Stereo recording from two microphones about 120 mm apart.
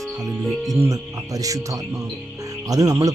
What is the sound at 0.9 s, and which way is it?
Speech, 30° right (ahead or behind).